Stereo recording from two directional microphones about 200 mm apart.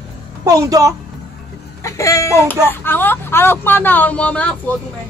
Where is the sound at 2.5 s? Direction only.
10° left (ahead or behind).